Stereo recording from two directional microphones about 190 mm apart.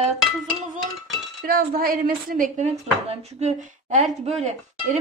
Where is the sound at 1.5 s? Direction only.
50° right (ahead or behind).